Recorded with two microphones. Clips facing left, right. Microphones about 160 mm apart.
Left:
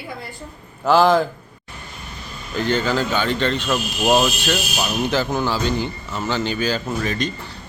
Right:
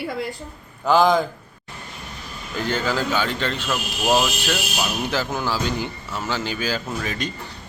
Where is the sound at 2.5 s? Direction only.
5° right (ahead or behind).